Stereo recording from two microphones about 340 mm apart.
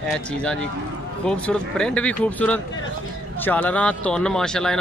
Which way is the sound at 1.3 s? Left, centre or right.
Centre.